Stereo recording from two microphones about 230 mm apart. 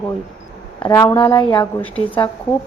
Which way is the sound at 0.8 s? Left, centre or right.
Centre.